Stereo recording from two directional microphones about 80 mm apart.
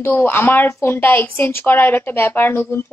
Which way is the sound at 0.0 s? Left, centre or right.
Left.